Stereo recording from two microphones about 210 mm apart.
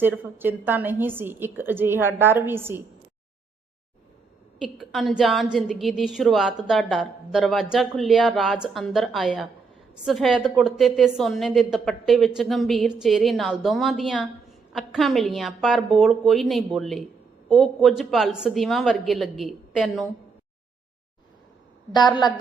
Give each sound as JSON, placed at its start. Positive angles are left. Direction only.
{"t": 0.0, "sound": "a woman's voice", "side_deg": -10}
{"t": 4.6, "sound": "a woman's voice", "side_deg": 0}
{"t": 21.9, "sound": "a woman's voice", "side_deg": 20}